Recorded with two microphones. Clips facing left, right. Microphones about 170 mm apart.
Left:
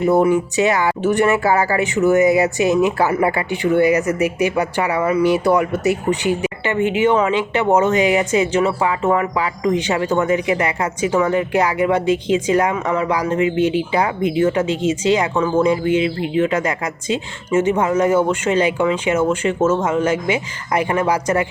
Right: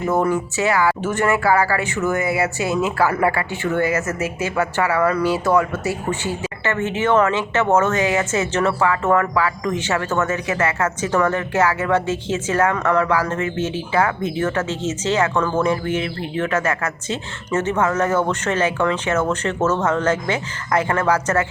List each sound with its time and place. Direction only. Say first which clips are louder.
0.0 s speech: left 5 dB; 15° left (ahead or behind)